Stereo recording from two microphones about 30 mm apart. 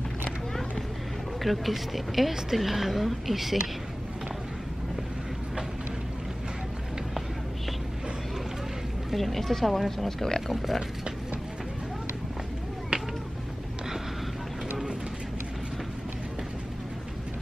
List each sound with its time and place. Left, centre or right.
1.4 s a woman's voice: centre
9.1 s speech: centre
12.9 s a sound: right